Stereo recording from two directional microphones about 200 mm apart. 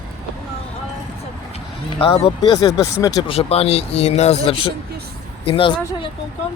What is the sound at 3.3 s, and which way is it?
Speech, 30° left (ahead or behind).